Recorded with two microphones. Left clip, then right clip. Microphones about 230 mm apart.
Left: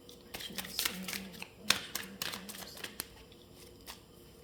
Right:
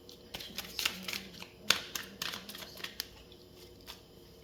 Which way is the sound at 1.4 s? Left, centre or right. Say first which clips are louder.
Right 1 dB; left.